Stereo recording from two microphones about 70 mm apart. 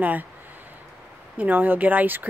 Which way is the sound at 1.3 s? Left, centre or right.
Right.